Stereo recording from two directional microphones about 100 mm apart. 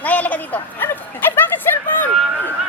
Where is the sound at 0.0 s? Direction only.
15° left (ahead or behind).